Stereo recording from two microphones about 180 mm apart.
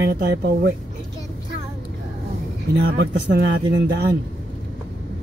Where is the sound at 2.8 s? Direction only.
65° right (ahead or behind).